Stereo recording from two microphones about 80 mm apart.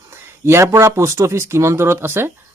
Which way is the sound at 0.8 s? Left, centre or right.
Right.